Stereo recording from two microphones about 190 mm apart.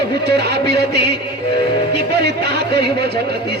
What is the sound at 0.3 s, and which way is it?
Speech, 60° right (ahead or behind).